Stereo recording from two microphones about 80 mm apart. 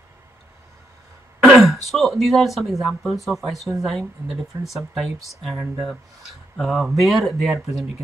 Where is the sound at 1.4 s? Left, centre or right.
Centre.